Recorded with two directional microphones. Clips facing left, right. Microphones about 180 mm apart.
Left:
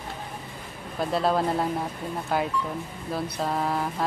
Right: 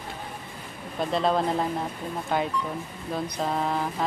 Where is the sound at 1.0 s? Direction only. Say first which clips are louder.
Even; 5° left (ahead or behind).